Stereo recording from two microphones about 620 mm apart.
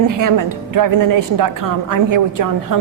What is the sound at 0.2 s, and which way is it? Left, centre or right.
A woman's voice, right.